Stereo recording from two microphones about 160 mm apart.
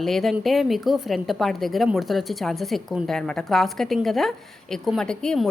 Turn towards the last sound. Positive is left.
turn(degrees=5)  # may be behind; listen again after turning